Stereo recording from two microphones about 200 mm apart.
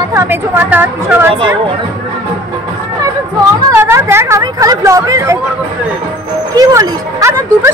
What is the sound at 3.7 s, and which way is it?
Speech, 15° right (ahead or behind).